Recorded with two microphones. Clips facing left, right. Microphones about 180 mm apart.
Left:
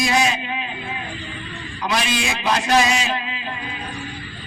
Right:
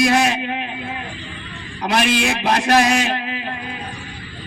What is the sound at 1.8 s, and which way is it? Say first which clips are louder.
A man's voice: right 5 dB; 60° right (ahead or behind).